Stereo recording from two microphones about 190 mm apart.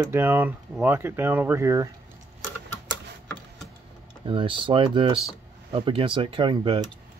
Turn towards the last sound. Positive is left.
turn(degrees=-25)  # may be behind; listen again after turning